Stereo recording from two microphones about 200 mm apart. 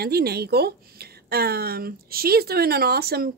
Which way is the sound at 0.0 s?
50° right (ahead or behind).